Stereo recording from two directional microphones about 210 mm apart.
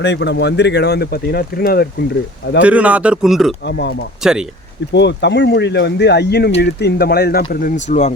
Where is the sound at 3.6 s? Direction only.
55° left (ahead or behind).